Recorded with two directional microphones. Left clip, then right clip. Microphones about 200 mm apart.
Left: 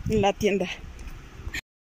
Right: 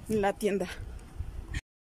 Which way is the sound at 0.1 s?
5° left (ahead or behind).